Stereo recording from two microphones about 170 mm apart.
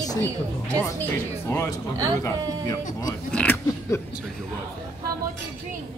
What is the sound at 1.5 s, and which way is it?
Speech, 20° left (ahead or behind).